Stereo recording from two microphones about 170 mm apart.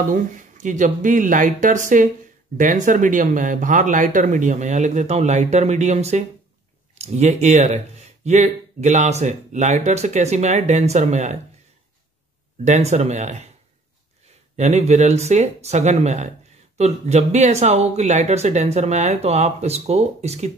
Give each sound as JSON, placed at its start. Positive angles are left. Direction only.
{"t": 0.1, "sound": "speech", "side_deg": -50}
{"t": 12.6, "sound": "speech", "side_deg": -40}
{"t": 14.6, "sound": "speech", "side_deg": -40}